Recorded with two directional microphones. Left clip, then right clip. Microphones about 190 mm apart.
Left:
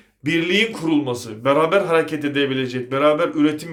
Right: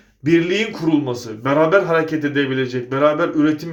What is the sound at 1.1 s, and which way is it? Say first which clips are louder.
A man's voice: right 1 dB; 35° left (ahead or behind).